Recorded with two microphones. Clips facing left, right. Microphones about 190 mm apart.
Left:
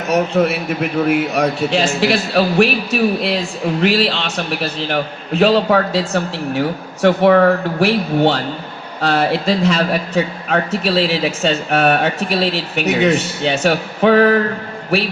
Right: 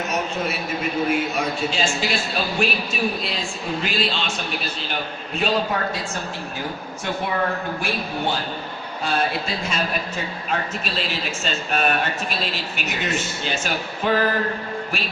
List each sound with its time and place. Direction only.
0.1 s a man's voice: 65° left (ahead or behind)